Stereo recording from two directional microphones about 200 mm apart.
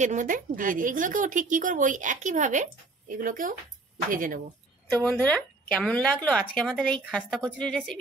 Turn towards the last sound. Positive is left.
turn(degrees=5)  # may be behind; listen again after turning